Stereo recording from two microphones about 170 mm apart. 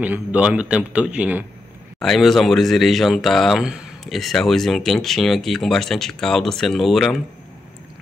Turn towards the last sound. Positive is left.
turn(degrees=0)  # may be behind; listen again after turning